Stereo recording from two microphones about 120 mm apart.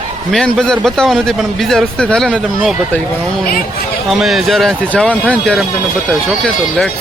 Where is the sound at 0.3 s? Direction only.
5° left (ahead or behind).